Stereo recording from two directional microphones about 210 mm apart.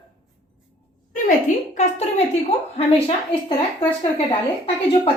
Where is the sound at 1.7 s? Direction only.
30° left (ahead or behind).